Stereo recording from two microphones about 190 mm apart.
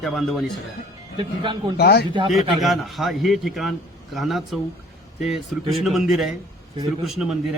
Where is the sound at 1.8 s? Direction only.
55° left (ahead or behind).